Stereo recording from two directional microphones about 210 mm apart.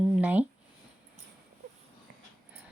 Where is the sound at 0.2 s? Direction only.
5° right (ahead or behind).